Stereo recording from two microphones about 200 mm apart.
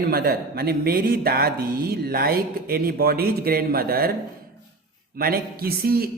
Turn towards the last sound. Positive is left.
turn(degrees=-50)  # may be behind; listen again after turning